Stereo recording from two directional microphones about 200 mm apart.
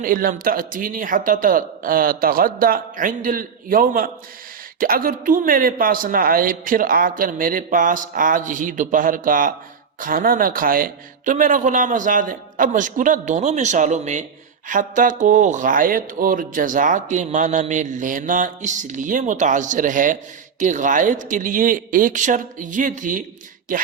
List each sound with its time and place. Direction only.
0.0 s a man's voice: 45° right (ahead or behind)